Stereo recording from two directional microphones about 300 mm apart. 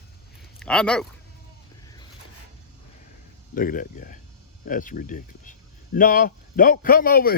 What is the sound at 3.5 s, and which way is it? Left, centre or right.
Speech, left.